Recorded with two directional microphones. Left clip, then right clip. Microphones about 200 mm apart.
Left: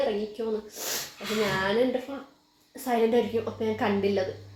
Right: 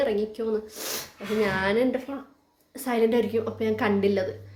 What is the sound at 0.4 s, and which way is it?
Speech, 10° right (ahead or behind).